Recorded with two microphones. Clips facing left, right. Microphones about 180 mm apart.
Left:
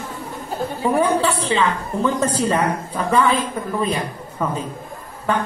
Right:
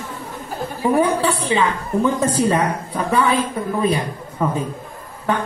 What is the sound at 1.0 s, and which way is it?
A woman's voice, 15° right (ahead or behind).